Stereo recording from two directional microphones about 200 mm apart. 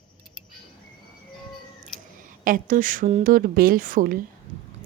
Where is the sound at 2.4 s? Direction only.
45° right (ahead or behind).